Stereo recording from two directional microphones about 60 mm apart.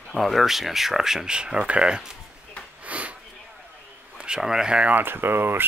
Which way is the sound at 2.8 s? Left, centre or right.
Right.